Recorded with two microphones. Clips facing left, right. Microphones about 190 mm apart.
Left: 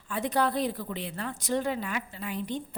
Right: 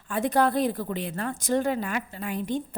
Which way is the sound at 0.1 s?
50° right (ahead or behind).